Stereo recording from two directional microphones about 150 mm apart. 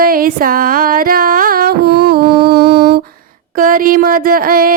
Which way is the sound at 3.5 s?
65° right (ahead or behind).